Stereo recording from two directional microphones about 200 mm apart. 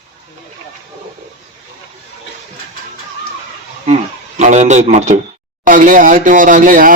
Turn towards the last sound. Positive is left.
turn(degrees=-45)  # may be behind; listen again after turning